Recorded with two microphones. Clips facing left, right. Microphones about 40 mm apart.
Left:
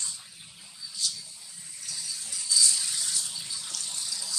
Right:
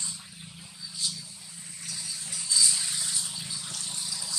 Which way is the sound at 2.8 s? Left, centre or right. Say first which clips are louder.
Even; centre.